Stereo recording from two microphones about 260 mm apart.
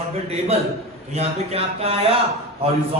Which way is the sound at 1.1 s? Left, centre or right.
Right.